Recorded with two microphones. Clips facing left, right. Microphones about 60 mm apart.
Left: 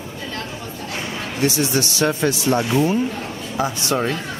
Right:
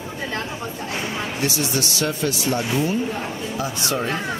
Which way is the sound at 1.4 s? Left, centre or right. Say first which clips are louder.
Left 6 dB; left.